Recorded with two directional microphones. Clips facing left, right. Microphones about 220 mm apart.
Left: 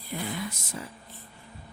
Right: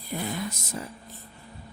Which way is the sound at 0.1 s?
40° right (ahead or behind).